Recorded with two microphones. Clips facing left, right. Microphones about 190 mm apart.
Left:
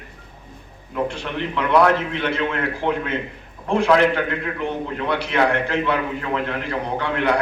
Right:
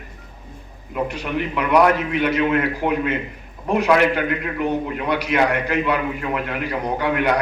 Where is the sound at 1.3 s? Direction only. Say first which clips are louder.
Right 1 dB; 10° right (ahead or behind).